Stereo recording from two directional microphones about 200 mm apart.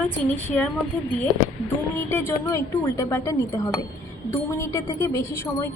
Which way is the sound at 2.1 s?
10° left (ahead or behind).